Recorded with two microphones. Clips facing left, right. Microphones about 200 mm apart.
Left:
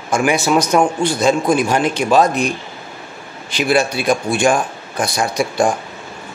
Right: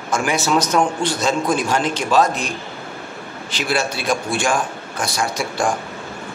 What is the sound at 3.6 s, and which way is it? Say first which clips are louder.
A man's voice: left 6 dB; 15° left (ahead or behind).